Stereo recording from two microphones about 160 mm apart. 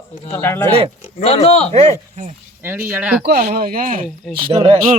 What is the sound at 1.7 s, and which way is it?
Speech, 45° right (ahead or behind).